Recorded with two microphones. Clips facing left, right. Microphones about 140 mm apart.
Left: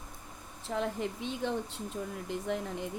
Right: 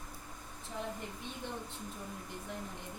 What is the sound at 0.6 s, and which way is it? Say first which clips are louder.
Speech: left 9 dB; 90° left.